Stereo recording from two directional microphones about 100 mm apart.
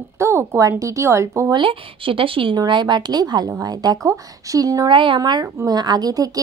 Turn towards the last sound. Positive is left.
turn(degrees=-40)  # may be behind; listen again after turning